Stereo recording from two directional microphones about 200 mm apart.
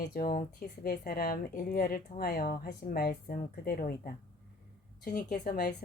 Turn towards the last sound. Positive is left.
turn(degrees=50)  # may be behind; listen again after turning